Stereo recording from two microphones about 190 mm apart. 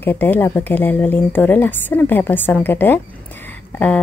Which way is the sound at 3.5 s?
10° left (ahead or behind).